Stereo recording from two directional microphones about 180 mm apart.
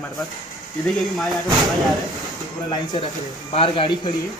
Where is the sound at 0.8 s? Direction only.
Centre (ahead or behind).